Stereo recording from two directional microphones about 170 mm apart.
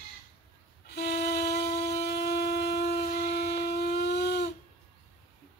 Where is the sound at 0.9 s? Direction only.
70° left (ahead or behind).